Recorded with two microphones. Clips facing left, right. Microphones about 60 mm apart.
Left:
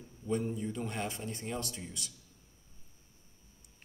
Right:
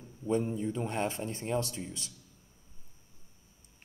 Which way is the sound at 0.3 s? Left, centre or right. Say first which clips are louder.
Right 3 dB; right.